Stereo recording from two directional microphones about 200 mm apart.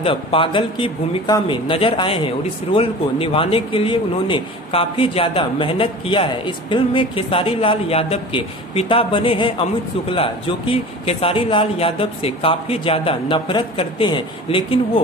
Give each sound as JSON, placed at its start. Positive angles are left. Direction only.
{"t": 0.0, "sound": "speech", "side_deg": 25}